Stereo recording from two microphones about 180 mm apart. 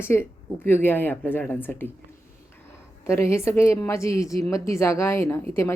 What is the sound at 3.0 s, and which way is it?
Speech, 15° left (ahead or behind).